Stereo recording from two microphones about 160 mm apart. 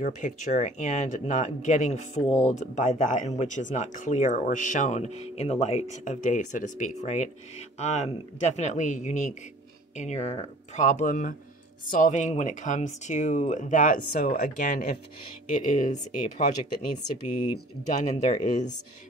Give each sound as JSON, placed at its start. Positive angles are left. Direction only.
{"t": 0.0, "sound": "speech", "side_deg": 50}
{"t": 17.8, "sound": "speech", "side_deg": 50}